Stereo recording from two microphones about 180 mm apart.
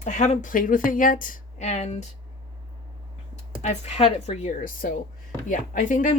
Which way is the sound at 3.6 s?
40° left (ahead or behind).